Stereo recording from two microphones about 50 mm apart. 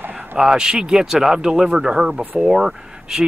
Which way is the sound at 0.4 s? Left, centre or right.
Centre.